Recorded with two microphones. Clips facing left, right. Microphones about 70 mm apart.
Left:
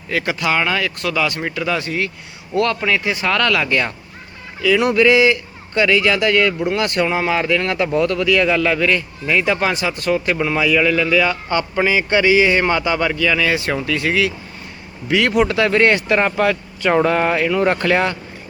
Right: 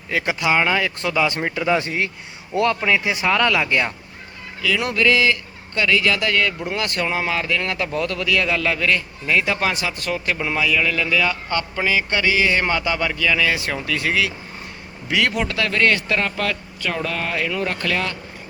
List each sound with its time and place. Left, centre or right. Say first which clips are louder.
0.1 s speech: left 1 dB; centre
2.6 s speech: left 1 dB; centre
4.6 s a man's voice: left 6 dB; centre
11.4 s a man's voice: left 4 dB; centre
15.5 s speech: left 5 dB; left